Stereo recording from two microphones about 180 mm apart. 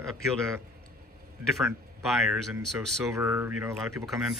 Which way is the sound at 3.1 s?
10° right (ahead or behind).